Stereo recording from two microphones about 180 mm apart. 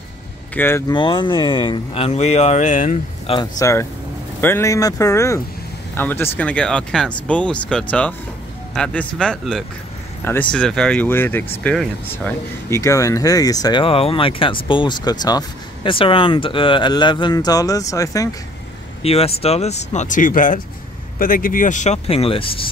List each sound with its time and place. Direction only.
0.6 s speech: 15° left (ahead or behind)
0.9 s speech: 25° left (ahead or behind); by 3.0 s 45° left (ahead or behind)
3.3 s speech: 20° left (ahead or behind)
19.0 s speech: 35° left (ahead or behind)